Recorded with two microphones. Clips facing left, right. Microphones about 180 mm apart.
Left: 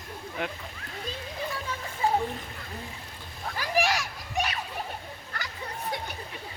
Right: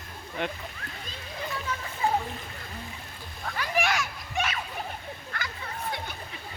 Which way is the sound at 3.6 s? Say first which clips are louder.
Left 1 dB; 35° left (ahead or behind).